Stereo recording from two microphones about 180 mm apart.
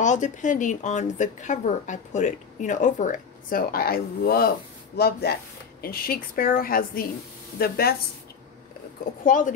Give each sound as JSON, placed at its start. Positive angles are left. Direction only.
{"t": 0.0, "sound": "speech", "side_deg": 45}
{"t": 9.2, "sound": "speech", "side_deg": 45}